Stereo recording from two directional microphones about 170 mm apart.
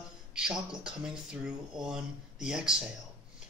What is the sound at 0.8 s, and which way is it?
Speech, 5° right (ahead or behind).